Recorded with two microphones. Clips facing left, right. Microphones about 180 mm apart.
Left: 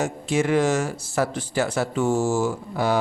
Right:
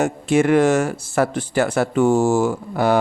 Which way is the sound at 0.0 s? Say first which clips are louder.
Right 6 dB; 60° right (ahead or behind).